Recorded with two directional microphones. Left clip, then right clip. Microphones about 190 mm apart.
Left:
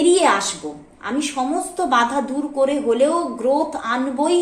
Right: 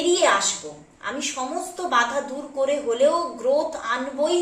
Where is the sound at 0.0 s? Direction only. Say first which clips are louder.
Left 4 dB; 50° left (ahead or behind).